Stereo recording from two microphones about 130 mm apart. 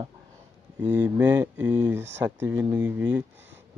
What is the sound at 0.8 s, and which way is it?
Speech, 15° right (ahead or behind).